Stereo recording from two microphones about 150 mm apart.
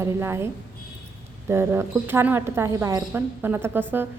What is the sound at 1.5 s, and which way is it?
Speech, 15° right (ahead or behind).